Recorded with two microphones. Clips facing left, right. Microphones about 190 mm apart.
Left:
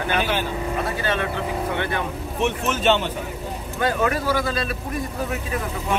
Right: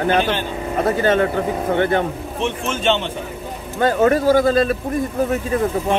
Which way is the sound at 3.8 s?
45° right (ahead or behind).